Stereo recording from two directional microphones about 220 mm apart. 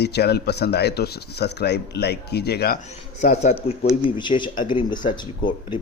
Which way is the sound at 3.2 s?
30° left (ahead or behind).